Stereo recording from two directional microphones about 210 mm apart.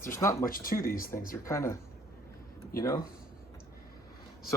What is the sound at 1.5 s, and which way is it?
Speech, 15° left (ahead or behind).